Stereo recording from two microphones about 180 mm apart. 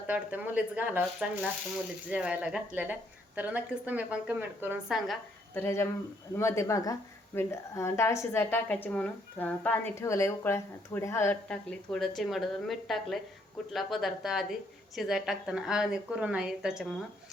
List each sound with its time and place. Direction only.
0.1 s a woman's voice: 10° right (ahead or behind)
5.5 s a woman's voice: 15° left (ahead or behind); by 16.8 s 5° right (ahead or behind)